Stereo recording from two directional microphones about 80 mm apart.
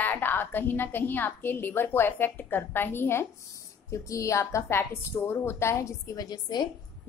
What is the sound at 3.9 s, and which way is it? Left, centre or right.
A woman's voice, left.